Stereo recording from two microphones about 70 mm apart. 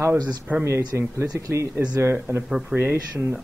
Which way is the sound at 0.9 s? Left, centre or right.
Right.